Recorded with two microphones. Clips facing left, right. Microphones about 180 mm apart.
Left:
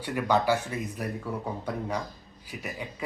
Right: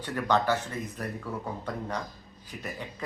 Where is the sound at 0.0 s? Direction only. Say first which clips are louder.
Left 1 dB; 10° left (ahead or behind).